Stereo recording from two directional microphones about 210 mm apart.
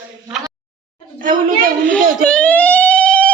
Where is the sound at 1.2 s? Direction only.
40° right (ahead or behind).